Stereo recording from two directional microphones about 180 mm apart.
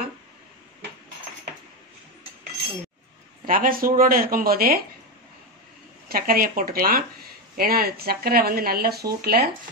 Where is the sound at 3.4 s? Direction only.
50° right (ahead or behind).